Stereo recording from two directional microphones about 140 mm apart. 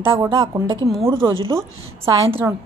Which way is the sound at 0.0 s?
20° right (ahead or behind).